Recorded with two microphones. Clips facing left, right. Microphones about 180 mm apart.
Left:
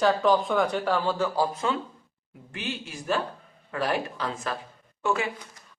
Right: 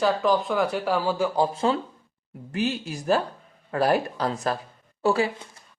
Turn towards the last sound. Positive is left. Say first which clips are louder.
# right 4 dB
turn(degrees=-30)  # may be behind; listen again after turning